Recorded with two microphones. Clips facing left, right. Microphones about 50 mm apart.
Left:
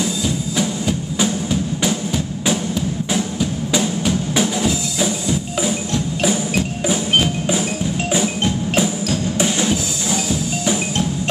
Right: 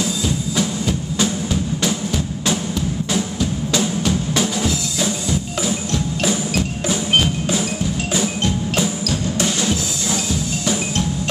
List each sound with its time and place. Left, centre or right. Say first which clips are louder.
0.6 s music: left 1 dB; centre
3.1 s drum: left 1 dB; centre
5.6 s wood block: left 1 dB; centre
8.7 s wood block: left 2 dB; centre
10.6 s wood block: left 1 dB; centre